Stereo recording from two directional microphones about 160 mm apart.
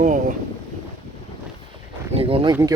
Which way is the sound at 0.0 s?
55° right (ahead or behind).